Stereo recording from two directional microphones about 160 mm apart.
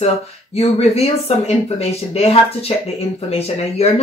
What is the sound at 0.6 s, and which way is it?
Speech, 40° left (ahead or behind).